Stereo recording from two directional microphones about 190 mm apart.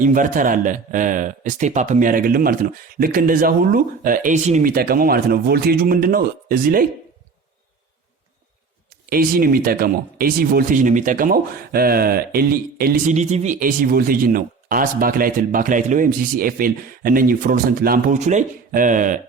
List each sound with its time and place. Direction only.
0.0 s speech: 45° right (ahead or behind)
9.0 s speech: 50° right (ahead or behind)
13.1 s speech: 40° right (ahead or behind)